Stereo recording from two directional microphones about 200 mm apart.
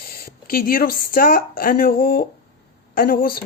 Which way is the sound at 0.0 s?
50° left (ahead or behind).